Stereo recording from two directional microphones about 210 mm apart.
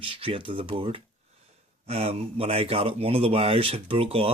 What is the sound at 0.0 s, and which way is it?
Speech, 25° right (ahead or behind).